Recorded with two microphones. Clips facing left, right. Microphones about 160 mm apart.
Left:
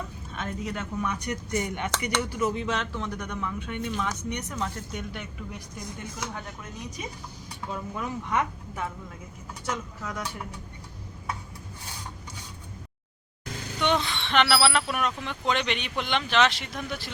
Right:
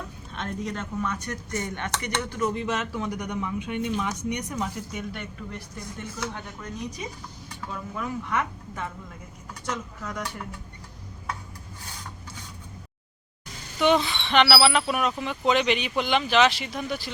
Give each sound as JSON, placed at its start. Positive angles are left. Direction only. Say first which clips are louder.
{"t": 0.3, "sound": "speech", "louder": "right 1 dB", "side_deg": 5}
{"t": 7.7, "sound": "speech", "louder": "even", "side_deg": 20}
{"t": 9.6, "sound": "speech", "louder": "even", "side_deg": 5}
{"t": 13.8, "sound": "speech", "louder": "right 5 dB", "side_deg": -5}